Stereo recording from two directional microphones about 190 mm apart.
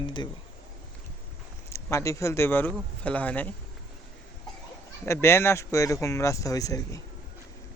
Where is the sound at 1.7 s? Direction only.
15° left (ahead or behind).